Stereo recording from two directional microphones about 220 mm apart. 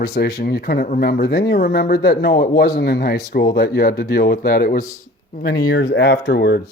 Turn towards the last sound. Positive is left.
turn(degrees=45)  # may be behind; listen again after turning